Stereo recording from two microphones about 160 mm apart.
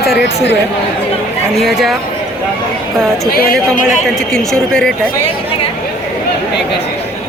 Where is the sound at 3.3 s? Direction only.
70° left (ahead or behind).